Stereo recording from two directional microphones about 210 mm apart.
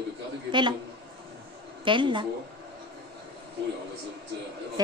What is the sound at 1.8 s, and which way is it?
Speech, 25° right (ahead or behind).